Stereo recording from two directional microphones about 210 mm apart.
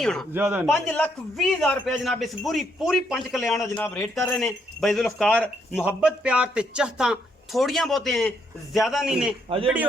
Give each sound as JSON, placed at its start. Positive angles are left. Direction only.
{"t": 0.0, "sound": "a man's voice", "side_deg": 0}
{"t": 0.7, "sound": "a man's voice", "side_deg": 5}
{"t": 3.8, "sound": "speech", "side_deg": 15}
{"t": 4.4, "sound": "a man's voice", "side_deg": 0}